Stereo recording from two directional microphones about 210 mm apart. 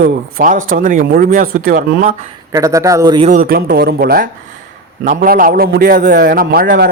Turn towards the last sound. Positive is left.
turn(degrees=-45)  # may be behind; listen again after turning